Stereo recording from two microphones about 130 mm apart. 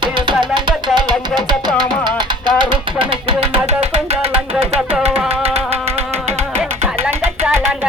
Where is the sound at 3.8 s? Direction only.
50° right (ahead or behind).